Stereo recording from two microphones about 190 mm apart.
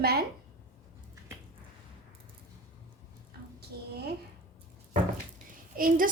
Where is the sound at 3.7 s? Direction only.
55° right (ahead or behind).